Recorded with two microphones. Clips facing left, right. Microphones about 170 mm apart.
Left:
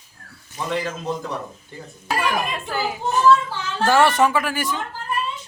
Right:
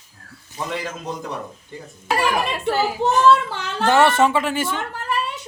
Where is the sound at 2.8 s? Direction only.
70° right (ahead or behind).